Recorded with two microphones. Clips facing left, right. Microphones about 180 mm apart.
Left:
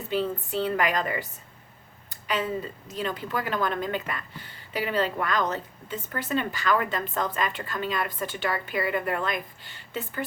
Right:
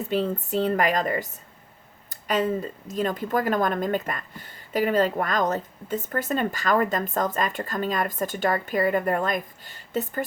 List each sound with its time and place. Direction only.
0.1 s a woman's voice: 45° right (ahead or behind)